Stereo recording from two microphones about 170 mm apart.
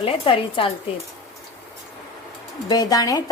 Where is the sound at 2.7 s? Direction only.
20° left (ahead or behind).